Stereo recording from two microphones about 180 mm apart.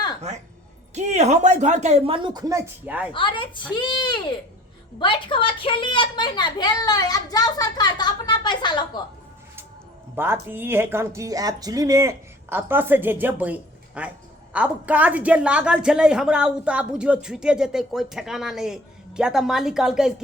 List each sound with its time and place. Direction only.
0.3 s speech: 40° right (ahead or behind); by 3.1 s 10° right (ahead or behind)
3.1 s a woman's voice: 30° left (ahead or behind)
10.2 s a woman's voice: 10° right (ahead or behind)